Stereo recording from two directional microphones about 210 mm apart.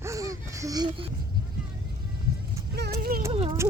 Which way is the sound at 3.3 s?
25° right (ahead or behind).